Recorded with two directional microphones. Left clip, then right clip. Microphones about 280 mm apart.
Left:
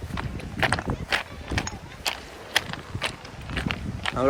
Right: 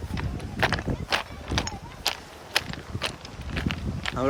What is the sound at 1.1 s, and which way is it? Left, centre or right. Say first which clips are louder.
Walk: even; centre.